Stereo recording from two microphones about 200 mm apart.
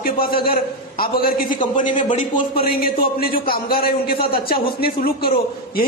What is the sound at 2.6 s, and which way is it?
A man's voice, 50° left (ahead or behind).